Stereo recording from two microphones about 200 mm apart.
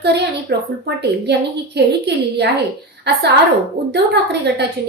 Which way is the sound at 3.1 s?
55° right (ahead or behind).